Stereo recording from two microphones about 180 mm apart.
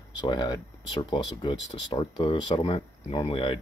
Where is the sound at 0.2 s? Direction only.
25° left (ahead or behind).